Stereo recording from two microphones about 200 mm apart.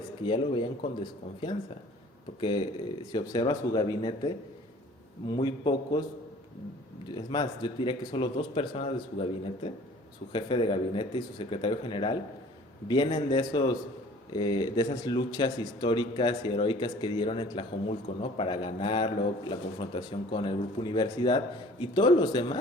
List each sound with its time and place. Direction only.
0.2 s speech: 25° left (ahead or behind)
2.4 s speech: 25° left (ahead or behind)
7.1 s speech: 20° left (ahead or behind)